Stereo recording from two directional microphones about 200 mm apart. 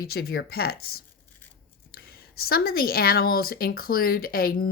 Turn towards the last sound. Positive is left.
turn(degrees=50)  # may be behind; listen again after turning